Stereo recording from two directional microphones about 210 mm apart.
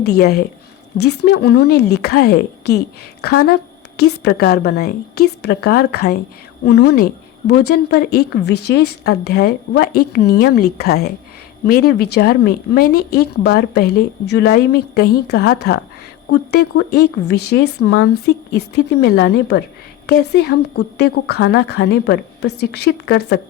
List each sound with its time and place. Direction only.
0.2 s speech: 50° left (ahead or behind)
3.9 s a woman's voice: 90° left
4.2 s speech: 50° left (ahead or behind)